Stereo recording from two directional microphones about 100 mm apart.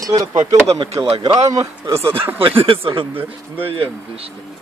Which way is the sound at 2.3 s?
65° right (ahead or behind).